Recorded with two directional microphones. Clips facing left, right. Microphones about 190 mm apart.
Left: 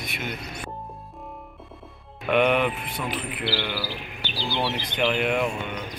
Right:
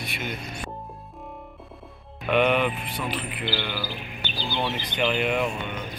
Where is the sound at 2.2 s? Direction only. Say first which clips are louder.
Left 1 dB; 5° left (ahead or behind).